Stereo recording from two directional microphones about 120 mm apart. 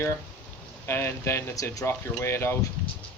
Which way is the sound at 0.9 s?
20° left (ahead or behind).